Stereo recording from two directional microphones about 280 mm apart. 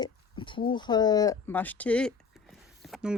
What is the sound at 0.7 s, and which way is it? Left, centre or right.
Speech, centre.